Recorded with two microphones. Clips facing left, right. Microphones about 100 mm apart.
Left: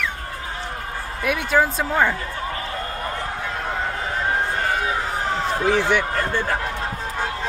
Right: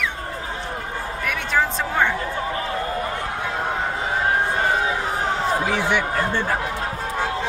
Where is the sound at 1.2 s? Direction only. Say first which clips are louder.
Left 3 dB; 10° left (ahead or behind).